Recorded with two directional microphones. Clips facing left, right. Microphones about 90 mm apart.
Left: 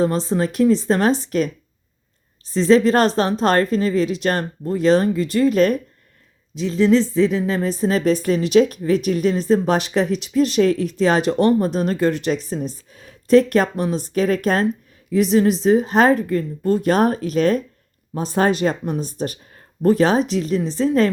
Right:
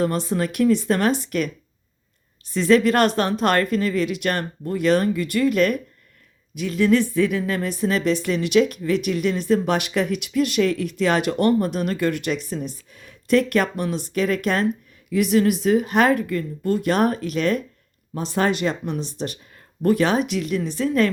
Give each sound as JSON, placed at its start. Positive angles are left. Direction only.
{"t": 0.0, "sound": "speech", "side_deg": 30}
{"t": 2.5, "sound": "speech", "side_deg": 30}